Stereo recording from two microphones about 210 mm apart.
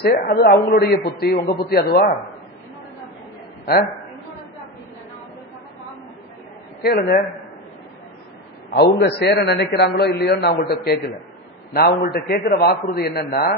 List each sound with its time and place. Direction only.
0.0 s a man's voice: 45° left (ahead or behind)
6.8 s a man's voice: 45° left (ahead or behind)
8.7 s a man's voice: 50° left (ahead or behind)